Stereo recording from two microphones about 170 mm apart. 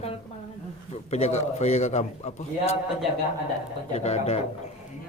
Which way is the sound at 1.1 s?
40° left (ahead or behind).